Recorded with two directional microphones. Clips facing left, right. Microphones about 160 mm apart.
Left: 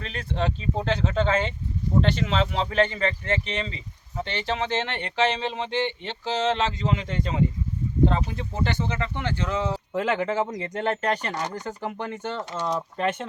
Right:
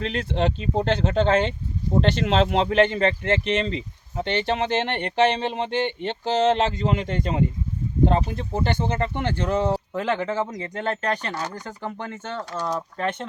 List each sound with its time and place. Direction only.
0.0 s speech: 75° right (ahead or behind); by 9.7 s 50° right (ahead or behind)
9.9 s speech: 10° left (ahead or behind)